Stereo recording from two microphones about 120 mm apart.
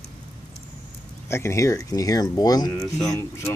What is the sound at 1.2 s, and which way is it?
Speech, 20° left (ahead or behind).